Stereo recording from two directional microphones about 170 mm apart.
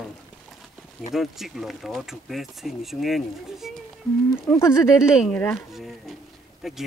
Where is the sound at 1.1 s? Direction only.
Centre (ahead or behind).